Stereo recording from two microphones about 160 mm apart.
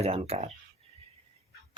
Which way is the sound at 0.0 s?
40° right (ahead or behind).